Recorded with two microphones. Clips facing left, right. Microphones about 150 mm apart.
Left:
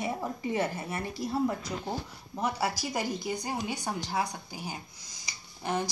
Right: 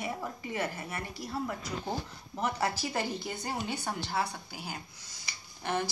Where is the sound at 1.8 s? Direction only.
10° left (ahead or behind).